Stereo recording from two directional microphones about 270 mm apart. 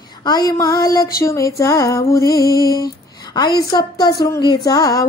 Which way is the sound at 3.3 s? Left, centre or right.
Centre.